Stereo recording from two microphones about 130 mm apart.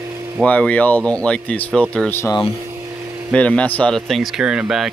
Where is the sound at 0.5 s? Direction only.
10° left (ahead or behind).